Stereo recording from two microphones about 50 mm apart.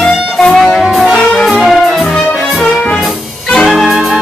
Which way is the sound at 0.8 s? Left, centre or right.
Centre.